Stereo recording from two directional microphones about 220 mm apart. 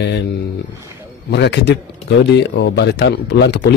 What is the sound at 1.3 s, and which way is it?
Speech, 50° left (ahead or behind).